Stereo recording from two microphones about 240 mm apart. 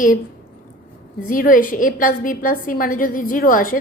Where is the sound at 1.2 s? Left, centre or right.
Left.